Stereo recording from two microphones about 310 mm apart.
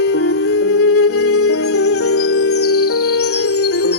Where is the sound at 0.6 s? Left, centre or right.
Left.